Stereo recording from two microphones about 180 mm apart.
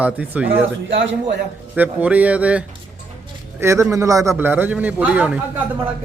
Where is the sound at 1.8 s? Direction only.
10° right (ahead or behind).